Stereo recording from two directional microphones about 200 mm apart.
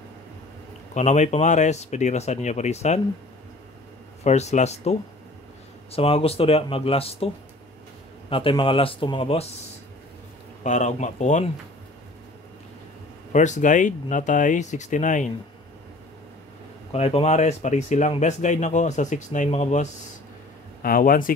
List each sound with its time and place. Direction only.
0.9 s speech: 35° left (ahead or behind)
4.2 s speech: 35° left (ahead or behind)
8.3 s speech: 25° left (ahead or behind)
10.6 s speech: 35° left (ahead or behind)
13.3 s speech: 35° left (ahead or behind)
16.9 s speech: 30° left (ahead or behind)